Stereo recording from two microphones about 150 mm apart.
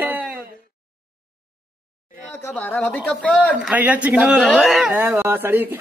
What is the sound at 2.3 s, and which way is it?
Speech, 15° left (ahead or behind).